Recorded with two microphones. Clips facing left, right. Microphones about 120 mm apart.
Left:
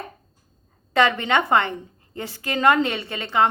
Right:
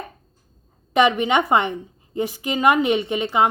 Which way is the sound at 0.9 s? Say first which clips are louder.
Right 2 dB; 15° right (ahead or behind).